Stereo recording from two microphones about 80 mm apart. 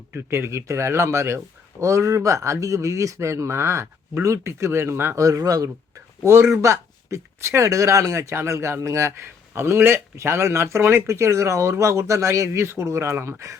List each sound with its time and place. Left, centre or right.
0.1 s speech: right
5.2 s speech: right
6.2 s speech: right